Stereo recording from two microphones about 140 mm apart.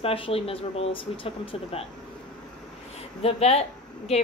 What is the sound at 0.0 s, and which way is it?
Speech, 40° left (ahead or behind).